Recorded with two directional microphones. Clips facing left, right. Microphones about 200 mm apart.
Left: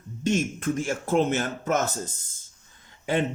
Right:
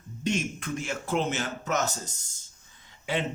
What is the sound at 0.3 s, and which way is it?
Speech, 50° left (ahead or behind).